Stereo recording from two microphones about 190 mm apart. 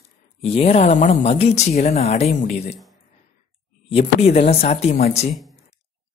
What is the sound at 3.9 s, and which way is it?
Speech, 30° left (ahead or behind).